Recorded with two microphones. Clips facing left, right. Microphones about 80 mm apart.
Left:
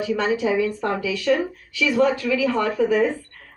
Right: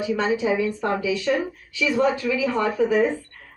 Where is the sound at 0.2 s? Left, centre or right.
Right.